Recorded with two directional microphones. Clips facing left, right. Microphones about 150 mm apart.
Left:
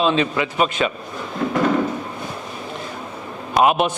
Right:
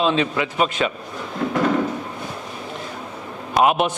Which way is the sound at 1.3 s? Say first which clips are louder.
Left 1 dB; 20° left (ahead or behind).